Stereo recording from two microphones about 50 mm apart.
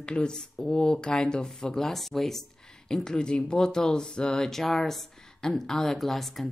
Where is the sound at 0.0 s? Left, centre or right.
Centre.